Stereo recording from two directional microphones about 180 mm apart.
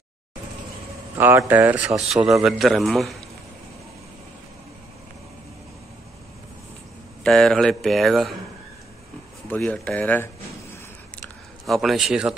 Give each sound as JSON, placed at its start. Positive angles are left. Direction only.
{"t": 1.1, "sound": "speech", "side_deg": -15}
{"t": 7.2, "sound": "speech", "side_deg": 0}
{"t": 9.5, "sound": "speech", "side_deg": 5}
{"t": 11.1, "sound": "a sound", "side_deg": 0}